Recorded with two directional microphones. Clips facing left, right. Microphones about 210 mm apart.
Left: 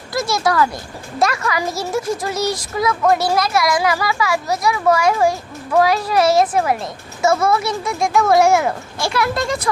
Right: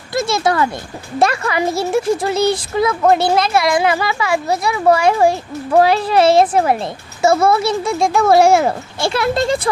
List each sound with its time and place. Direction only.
0.1 s speech: 25° right (ahead or behind)